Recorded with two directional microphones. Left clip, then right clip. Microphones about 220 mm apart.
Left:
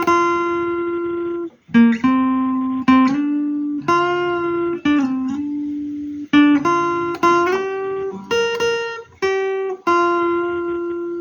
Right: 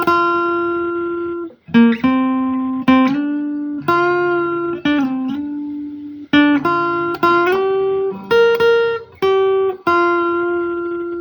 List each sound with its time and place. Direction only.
0.0 s music: 40° right (ahead or behind)
1.7 s guitar: 40° right (ahead or behind)
3.9 s music: 40° right (ahead or behind)
6.3 s guitar: 40° right (ahead or behind)